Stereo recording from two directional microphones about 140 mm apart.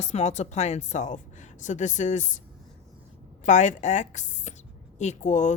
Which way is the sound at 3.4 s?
60° left (ahead or behind).